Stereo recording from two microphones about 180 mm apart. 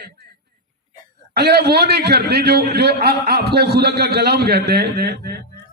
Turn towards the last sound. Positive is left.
turn(degrees=-60)  # may be behind; listen again after turning